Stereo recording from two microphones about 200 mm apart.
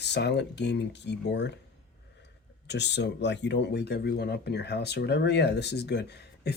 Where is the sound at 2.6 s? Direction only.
60° left (ahead or behind).